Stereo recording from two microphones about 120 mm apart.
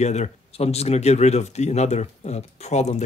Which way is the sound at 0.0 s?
70° left (ahead or behind).